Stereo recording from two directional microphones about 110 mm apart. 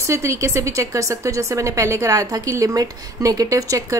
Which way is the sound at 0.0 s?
25° right (ahead or behind).